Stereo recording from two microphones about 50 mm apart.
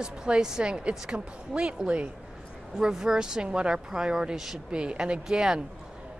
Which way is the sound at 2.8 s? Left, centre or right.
Centre.